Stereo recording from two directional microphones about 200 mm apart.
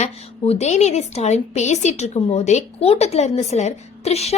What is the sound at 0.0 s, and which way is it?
A woman's voice, 30° left (ahead or behind).